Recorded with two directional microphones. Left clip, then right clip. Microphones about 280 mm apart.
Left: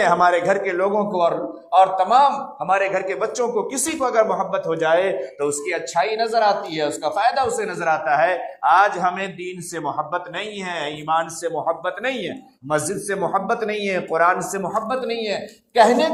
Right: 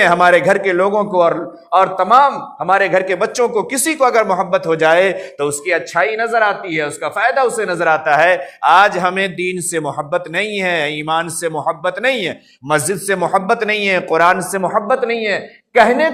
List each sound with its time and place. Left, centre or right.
0.0 s a man's voice: right